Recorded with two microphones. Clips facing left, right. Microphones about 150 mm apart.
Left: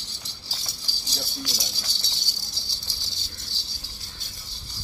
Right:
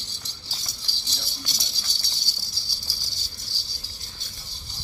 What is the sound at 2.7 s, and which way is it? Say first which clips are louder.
Rattle: even; 20° left (ahead or behind).